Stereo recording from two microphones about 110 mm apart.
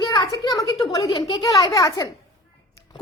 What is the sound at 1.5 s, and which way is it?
Speech, 30° left (ahead or behind).